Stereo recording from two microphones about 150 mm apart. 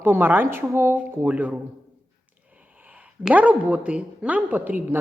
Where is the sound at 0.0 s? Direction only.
15° right (ahead or behind).